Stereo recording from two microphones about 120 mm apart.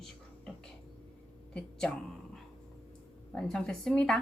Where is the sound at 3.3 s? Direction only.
5° left (ahead or behind).